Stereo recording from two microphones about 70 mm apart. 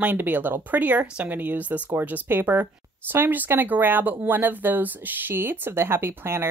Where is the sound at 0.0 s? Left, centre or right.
Right.